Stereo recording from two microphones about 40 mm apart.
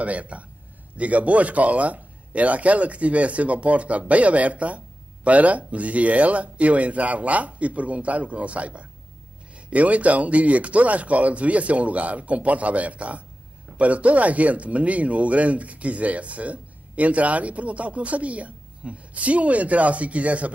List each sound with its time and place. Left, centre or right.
0.0 s a man's voice: right